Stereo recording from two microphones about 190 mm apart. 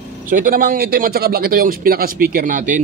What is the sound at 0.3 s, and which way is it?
Speech, 50° right (ahead or behind).